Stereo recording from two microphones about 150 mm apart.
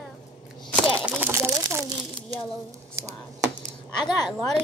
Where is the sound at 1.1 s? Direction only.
15° right (ahead or behind).